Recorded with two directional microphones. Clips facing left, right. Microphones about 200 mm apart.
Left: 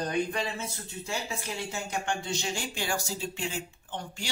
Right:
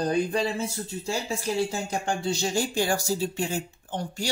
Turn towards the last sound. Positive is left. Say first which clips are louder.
# right 7 dB
turn(degrees=-40)  # may be behind; listen again after turning